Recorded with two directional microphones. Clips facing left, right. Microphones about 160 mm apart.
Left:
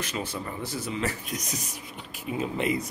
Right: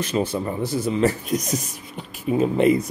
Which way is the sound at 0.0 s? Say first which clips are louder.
Right 9 dB; 25° right (ahead or behind).